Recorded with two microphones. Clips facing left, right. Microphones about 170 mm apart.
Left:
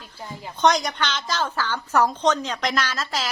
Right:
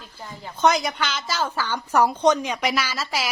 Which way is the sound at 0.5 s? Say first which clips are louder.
Even; 5° right (ahead or behind).